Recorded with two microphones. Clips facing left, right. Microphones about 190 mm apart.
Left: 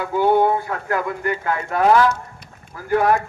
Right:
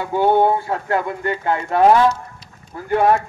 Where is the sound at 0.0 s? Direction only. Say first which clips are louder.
Right 1 dB; 25° right (ahead or behind).